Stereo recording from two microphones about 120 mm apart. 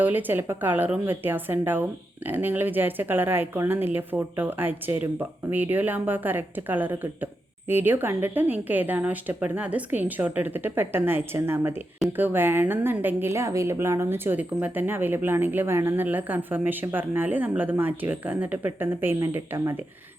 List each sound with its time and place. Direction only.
0.0 s a woman's voice: 15° right (ahead or behind)